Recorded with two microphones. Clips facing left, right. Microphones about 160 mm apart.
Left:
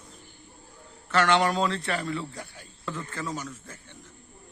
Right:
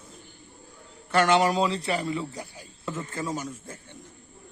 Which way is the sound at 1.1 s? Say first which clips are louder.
Right 2 dB; 10° right (ahead or behind).